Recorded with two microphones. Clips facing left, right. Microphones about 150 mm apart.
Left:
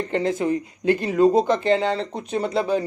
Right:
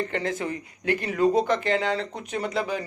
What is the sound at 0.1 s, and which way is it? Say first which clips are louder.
A man's voice: left 7 dB; 20° left (ahead or behind).